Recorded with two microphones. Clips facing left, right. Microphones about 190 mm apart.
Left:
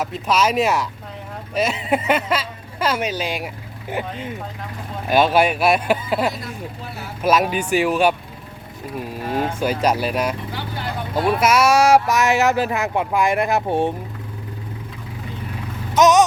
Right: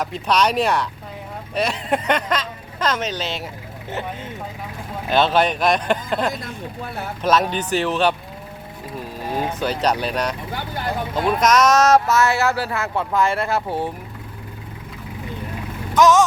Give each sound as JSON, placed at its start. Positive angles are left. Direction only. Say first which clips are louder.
{"t": 0.0, "sound": "speech", "louder": "even", "side_deg": 5}
{"t": 5.0, "sound": "speech", "louder": "left 2 dB", "side_deg": 10}
{"t": 9.2, "sound": "speech", "louder": "left 2 dB", "side_deg": -15}
{"t": 9.6, "sound": "speech", "louder": "left 1 dB", "side_deg": 10}
{"t": 10.5, "sound": "vehicle", "louder": "right 1 dB", "side_deg": -50}
{"t": 11.1, "sound": "speech", "louder": "left 1 dB", "side_deg": 10}
{"t": 16.0, "sound": "speech", "louder": "left 1 dB", "side_deg": 20}